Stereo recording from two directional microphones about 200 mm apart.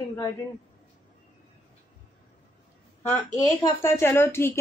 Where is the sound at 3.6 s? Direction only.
15° left (ahead or behind).